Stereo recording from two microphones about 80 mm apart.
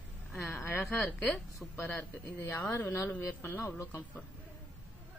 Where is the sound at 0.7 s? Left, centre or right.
Left.